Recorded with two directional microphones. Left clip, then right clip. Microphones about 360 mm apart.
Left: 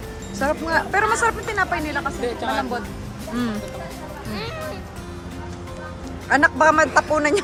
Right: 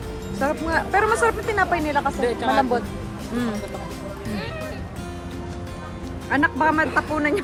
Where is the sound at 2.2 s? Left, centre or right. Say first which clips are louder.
Right 4 dB; right.